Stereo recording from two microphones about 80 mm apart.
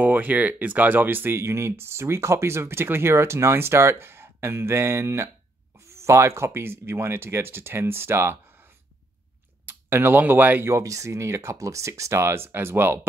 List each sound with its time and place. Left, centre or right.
0.0 s speech: right
9.7 s speech: right
10.7 s speech: right